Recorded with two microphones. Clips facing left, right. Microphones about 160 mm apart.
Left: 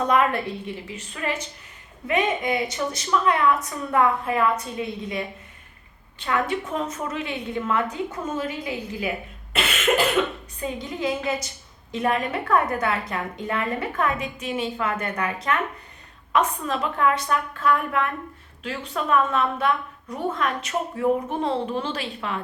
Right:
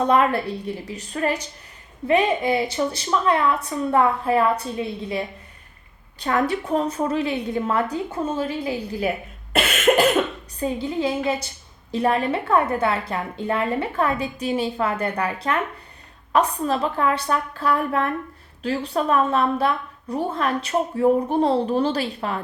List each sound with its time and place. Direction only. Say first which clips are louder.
0.1 s a woman's voice: right 2 dB; 35° right (ahead or behind)
10.6 s a woman's voice: right 5 dB; 30° right (ahead or behind)